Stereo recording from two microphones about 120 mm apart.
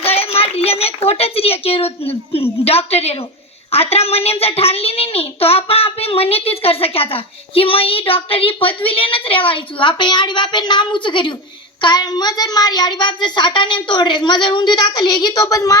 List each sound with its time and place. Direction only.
0.0 s child singing: 55° left (ahead or behind)
1.0 s a woman's voice: 55° left (ahead or behind); by 15.8 s 30° left (ahead or behind)